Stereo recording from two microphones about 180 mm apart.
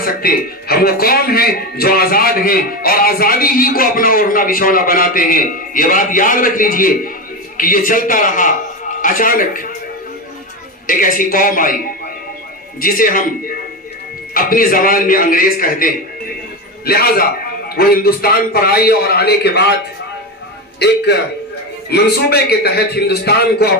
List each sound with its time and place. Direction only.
0.0 s a man's voice: 55° left (ahead or behind)
10.8 s a man's voice: 50° left (ahead or behind)
12.8 s a man's voice: 50° left (ahead or behind)
14.3 s a man's voice: 50° left (ahead or behind)
20.7 s a man's voice: 65° left (ahead or behind)